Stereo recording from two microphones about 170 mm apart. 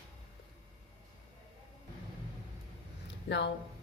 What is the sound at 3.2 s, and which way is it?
Speech, 90° left.